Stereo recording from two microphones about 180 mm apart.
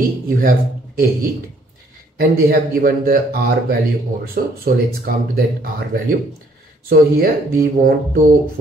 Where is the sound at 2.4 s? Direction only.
55° right (ahead or behind).